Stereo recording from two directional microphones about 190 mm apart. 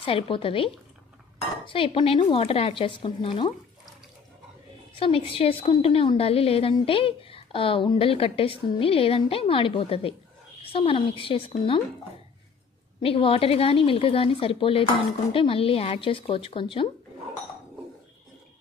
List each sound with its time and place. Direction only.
0.0 s a woman's voice: 30° left (ahead or behind)
1.7 s a woman's voice: 25° left (ahead or behind)
4.9 s a woman's voice: 30° left (ahead or behind)
13.0 s a woman's voice: 30° left (ahead or behind)